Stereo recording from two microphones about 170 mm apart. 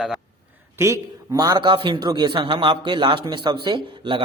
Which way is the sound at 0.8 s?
20° right (ahead or behind).